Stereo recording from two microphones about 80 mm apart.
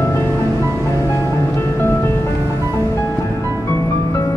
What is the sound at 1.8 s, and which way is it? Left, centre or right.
Music, left.